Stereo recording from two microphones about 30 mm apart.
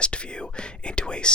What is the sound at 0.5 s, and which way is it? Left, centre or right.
Speech, left.